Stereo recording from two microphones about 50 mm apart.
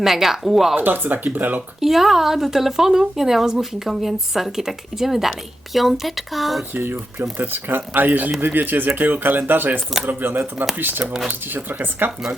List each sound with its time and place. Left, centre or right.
0.0 s a woman's voice: centre
0.8 s speech: right
1.8 s a woman's voice: centre
6.7 s speech: right
11.0 s speech: centre
11.3 s speech: right